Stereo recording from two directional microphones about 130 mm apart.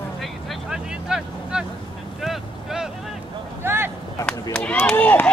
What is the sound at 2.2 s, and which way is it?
Boat, 5° right (ahead or behind).